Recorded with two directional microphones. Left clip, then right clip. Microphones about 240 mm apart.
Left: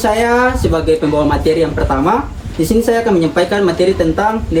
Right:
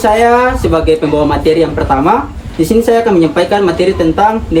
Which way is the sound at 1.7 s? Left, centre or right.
Right.